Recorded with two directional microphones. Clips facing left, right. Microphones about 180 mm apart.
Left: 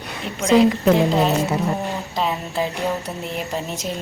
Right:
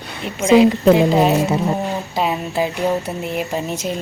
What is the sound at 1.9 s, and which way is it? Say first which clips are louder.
A woman's voice: right 3 dB; 5° right (ahead or behind).